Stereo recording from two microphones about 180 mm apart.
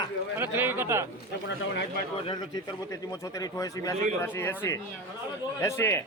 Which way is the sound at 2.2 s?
25° left (ahead or behind).